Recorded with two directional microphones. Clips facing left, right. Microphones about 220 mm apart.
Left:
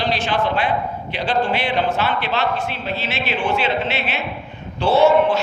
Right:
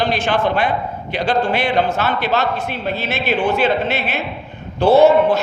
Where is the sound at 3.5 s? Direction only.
40° right (ahead or behind).